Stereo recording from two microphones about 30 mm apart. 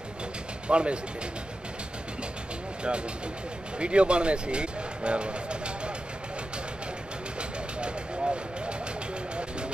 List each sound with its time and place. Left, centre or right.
0.7 s speech: right
3.8 s speech: right
7.3 s vehicle: right